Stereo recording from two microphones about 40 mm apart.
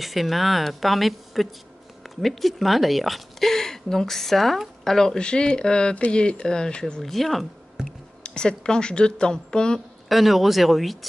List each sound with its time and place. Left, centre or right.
0.0 s speech: centre
5.2 s speech: left
7.0 s speech: centre
8.2 s speech: left
10.0 s speech: centre